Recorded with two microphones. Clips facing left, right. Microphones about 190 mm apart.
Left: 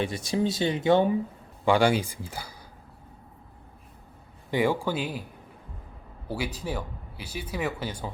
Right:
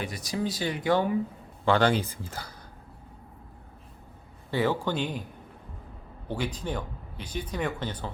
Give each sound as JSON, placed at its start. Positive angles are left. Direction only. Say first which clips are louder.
{"t": 0.0, "sound": "speech", "louder": "left 4 dB", "side_deg": 25}
{"t": 1.6, "sound": "speech", "louder": "left 1 dB", "side_deg": 10}
{"t": 4.5, "sound": "speech", "louder": "left 1 dB", "side_deg": 10}
{"t": 6.2, "sound": "speech", "louder": "even", "side_deg": 10}